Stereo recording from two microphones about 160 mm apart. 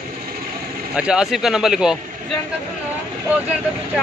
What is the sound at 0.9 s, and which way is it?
Speech, 5° right (ahead or behind).